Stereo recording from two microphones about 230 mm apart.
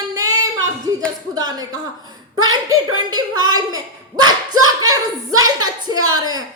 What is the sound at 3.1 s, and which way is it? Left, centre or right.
A woman's voice, centre.